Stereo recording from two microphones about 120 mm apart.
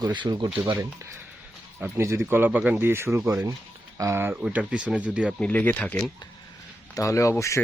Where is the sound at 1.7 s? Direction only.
10° right (ahead or behind).